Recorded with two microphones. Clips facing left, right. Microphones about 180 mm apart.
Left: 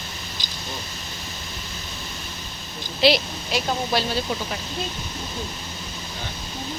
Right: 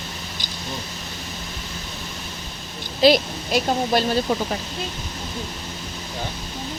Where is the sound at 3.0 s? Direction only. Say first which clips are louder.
Right 4 dB; 50° right (ahead or behind).